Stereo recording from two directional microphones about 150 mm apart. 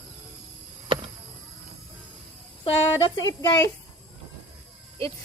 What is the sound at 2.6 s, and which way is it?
Speech, 35° left (ahead or behind).